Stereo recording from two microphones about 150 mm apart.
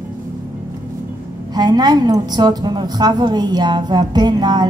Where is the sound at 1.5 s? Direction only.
25° right (ahead or behind).